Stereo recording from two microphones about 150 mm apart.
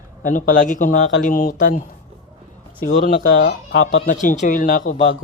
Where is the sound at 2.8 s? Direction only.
75° left (ahead or behind).